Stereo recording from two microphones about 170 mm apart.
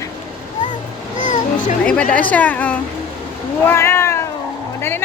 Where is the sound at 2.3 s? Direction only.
10° left (ahead or behind).